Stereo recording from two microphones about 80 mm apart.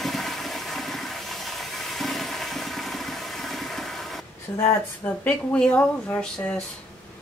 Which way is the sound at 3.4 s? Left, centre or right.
Centre.